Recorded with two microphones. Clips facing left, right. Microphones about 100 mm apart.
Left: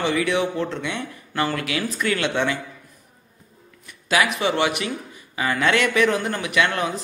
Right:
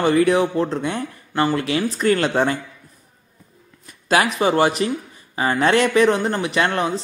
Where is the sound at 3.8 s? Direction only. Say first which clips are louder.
Right 3 dB; 40° right (ahead or behind).